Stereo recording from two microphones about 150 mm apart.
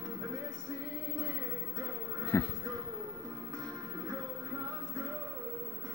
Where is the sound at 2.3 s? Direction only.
20° left (ahead or behind).